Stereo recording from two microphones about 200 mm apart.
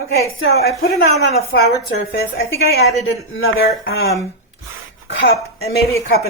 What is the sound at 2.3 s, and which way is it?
Speech, 50° left (ahead or behind).